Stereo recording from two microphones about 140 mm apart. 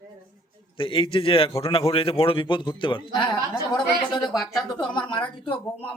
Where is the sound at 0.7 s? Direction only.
40° left (ahead or behind).